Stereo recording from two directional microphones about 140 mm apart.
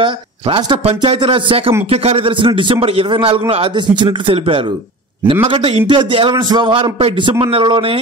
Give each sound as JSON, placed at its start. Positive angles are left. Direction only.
{"t": 0.0, "sound": "a man's voice", "side_deg": -35}